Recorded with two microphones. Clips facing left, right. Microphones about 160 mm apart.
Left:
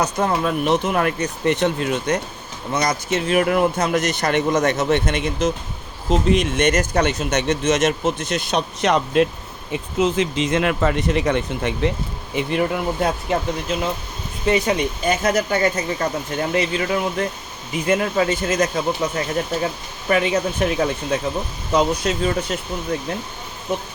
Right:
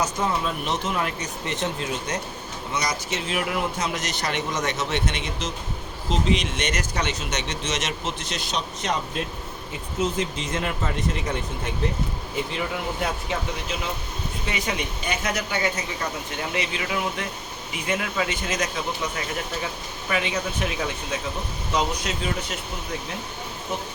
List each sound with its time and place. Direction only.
0.0 s speech: 60° left (ahead or behind)
10.0 s speech: 85° left
12.4 s speech: 60° left (ahead or behind)
13.3 s speech: 50° left (ahead or behind)
20.1 s speech: 50° left (ahead or behind)